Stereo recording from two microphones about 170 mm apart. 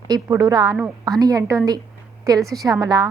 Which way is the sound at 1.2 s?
20° right (ahead or behind).